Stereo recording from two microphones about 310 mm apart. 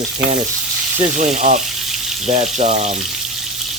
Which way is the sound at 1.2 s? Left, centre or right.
Right.